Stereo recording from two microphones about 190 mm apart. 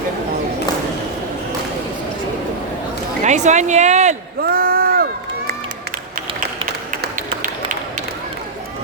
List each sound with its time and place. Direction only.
3.2 s speech: 40° right (ahead or behind)
4.4 s a sound: 50° right (ahead or behind)
7.4 s run: 45° right (ahead or behind)